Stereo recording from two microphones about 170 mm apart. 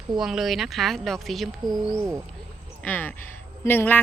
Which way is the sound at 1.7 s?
20° right (ahead or behind).